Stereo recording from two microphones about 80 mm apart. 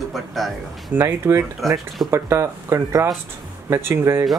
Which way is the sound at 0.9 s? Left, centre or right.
Right.